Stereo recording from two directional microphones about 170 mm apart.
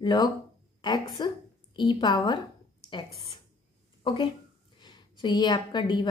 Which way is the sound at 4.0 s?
30° left (ahead or behind).